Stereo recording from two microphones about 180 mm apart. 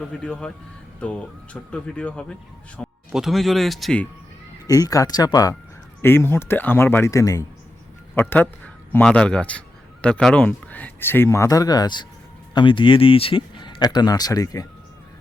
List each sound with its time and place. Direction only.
0.2 s speech: 5° left (ahead or behind)
4.6 s speech: 20° left (ahead or behind)